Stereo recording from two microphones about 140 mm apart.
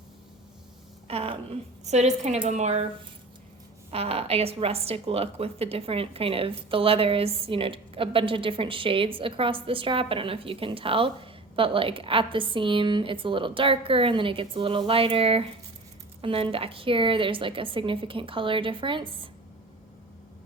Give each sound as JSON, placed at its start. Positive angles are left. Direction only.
{"t": 1.0, "sound": "a woman's voice", "side_deg": -45}
{"t": 3.9, "sound": "a woman's voice", "side_deg": -45}